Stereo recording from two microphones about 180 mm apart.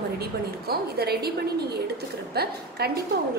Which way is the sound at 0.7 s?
60° right (ahead or behind).